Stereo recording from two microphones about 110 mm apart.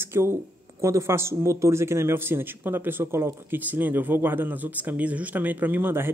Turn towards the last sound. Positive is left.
turn(degrees=-20)  # may be behind; listen again after turning